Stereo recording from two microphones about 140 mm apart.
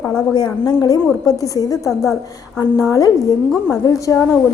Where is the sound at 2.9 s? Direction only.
25° left (ahead or behind).